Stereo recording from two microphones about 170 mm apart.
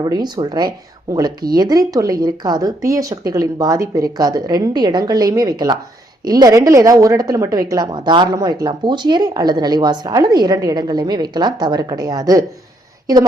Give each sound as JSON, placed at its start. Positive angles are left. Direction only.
{"t": 0.0, "sound": "a woman's voice", "side_deg": -25}